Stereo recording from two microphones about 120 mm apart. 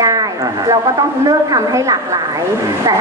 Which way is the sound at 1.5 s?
30° right (ahead or behind).